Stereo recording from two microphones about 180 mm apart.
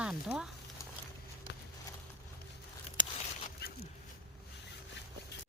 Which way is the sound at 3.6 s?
65° left (ahead or behind).